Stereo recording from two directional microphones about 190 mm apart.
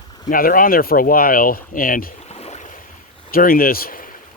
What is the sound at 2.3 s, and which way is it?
Boat, 35° left (ahead or behind).